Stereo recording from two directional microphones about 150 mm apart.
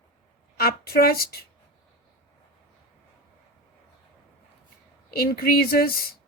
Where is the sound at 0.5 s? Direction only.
90° left.